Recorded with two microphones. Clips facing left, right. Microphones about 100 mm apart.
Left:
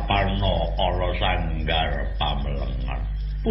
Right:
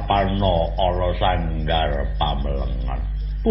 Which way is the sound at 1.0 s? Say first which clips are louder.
Right 5 dB; 25° right (ahead or behind).